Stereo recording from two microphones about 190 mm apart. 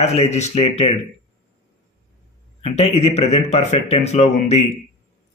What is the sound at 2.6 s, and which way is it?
Speech, 35° left (ahead or behind).